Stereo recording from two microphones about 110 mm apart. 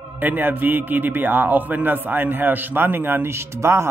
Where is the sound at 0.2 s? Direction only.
15° right (ahead or behind).